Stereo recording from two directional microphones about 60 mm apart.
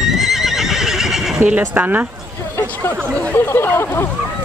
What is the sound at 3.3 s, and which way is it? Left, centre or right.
Speech, left.